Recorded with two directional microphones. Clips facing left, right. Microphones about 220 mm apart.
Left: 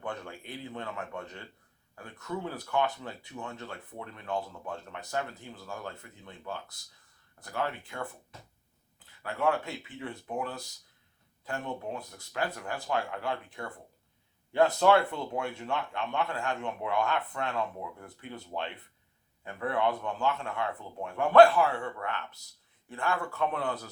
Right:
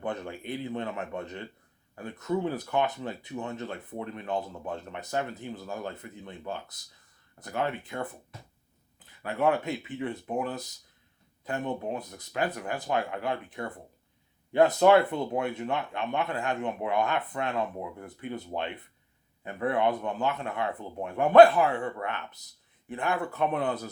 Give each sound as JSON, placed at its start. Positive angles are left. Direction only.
{"t": 0.0, "sound": "speech", "side_deg": -20}
{"t": 9.2, "sound": "speech", "side_deg": -20}